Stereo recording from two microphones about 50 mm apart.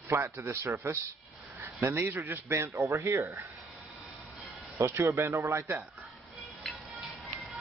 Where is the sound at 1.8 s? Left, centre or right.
Right.